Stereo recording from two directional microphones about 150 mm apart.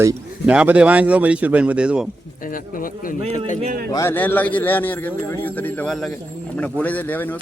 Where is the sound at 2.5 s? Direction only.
65° left (ahead or behind).